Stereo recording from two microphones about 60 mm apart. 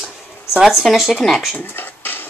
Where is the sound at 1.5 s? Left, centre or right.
Left.